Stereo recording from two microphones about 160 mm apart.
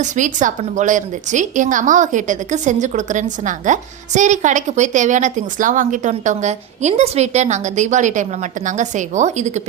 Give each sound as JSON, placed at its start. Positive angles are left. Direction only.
{"t": 0.0, "sound": "a woman's voice", "side_deg": -50}